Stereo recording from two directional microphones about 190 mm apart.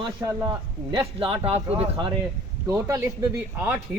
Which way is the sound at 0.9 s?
30° right (ahead or behind).